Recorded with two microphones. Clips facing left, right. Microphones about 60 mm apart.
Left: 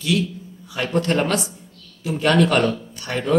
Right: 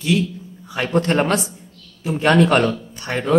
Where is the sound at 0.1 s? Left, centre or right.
Right.